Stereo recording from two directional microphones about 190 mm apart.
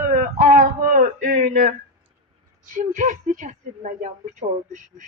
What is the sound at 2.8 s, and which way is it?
A woman's voice, 40° right (ahead or behind).